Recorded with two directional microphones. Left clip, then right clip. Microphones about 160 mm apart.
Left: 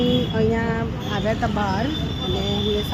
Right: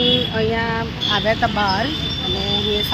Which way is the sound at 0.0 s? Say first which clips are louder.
Right 4 dB; 10° left (ahead or behind).